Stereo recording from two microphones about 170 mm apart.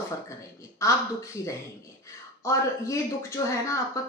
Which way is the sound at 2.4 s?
15° left (ahead or behind).